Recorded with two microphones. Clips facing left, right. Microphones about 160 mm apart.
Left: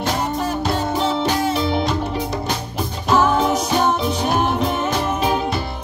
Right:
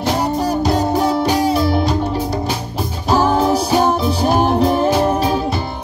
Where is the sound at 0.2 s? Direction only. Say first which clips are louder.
Right 5 dB; 35° right (ahead or behind).